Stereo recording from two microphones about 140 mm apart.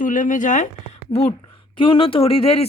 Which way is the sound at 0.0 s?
65° left (ahead or behind).